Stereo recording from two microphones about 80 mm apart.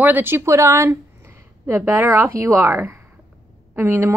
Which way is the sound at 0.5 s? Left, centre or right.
Right.